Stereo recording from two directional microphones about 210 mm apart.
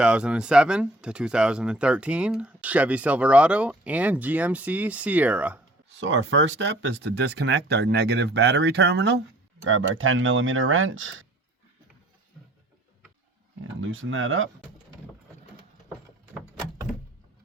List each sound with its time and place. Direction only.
0.0 s speech: 5° right (ahead or behind)
6.0 s speech: 60° right (ahead or behind)
9.6 s speech: 70° right (ahead or behind)
13.8 s speech: 70° right (ahead or behind)